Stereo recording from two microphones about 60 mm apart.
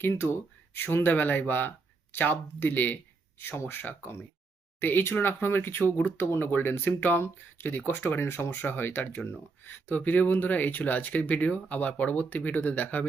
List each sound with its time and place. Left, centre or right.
0.2 s speech: left
3.3 s speech: left